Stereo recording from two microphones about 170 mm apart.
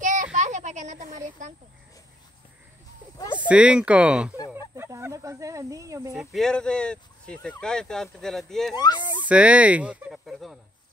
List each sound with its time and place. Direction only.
0.0 s a sound: 45° right (ahead or behind)
3.3 s speech: 5° right (ahead or behind)
6.1 s speech: centre (ahead or behind)
8.7 s speech: 25° left (ahead or behind)
9.2 s speech: 10° right (ahead or behind)